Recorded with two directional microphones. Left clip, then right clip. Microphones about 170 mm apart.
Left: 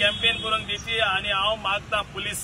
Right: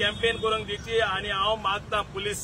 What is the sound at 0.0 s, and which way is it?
Vehicle, 10° right (ahead or behind).